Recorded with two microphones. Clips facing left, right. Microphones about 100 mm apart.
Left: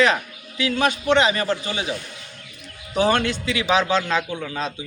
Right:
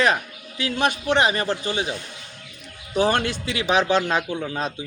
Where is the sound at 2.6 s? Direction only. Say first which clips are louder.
Left 1 dB; 5° right (ahead or behind).